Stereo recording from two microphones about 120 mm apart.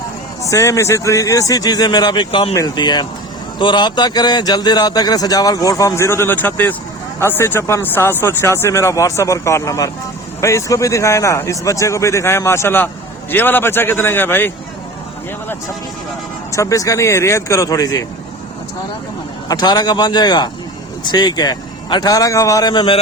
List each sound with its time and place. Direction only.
0.4 s a man's voice: 25° left (ahead or behind)
16.5 s speech: 25° left (ahead or behind)
19.5 s a man's voice: 35° left (ahead or behind)
22.7 s a man's voice: 40° left (ahead or behind)